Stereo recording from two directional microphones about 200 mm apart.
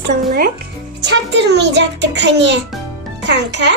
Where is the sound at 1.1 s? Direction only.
60° right (ahead or behind).